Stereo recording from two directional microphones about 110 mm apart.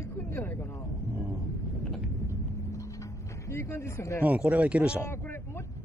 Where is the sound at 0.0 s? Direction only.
20° left (ahead or behind).